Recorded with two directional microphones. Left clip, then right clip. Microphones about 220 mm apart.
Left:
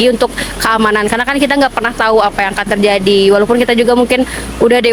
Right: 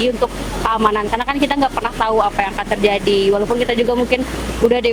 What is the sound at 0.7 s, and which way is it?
Speech, 45° left (ahead or behind).